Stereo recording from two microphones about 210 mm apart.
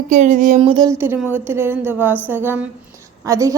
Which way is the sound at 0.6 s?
25° right (ahead or behind).